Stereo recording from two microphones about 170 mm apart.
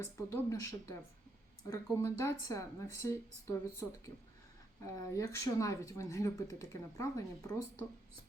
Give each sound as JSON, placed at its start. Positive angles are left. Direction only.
{"t": 0.0, "sound": "speech", "side_deg": 15}
{"t": 5.1, "sound": "speech", "side_deg": 20}